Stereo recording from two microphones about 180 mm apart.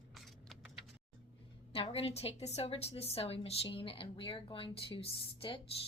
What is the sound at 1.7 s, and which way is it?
A woman's voice, 30° left (ahead or behind).